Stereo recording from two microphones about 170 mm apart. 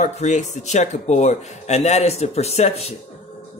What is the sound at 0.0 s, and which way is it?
Speech, 45° left (ahead or behind).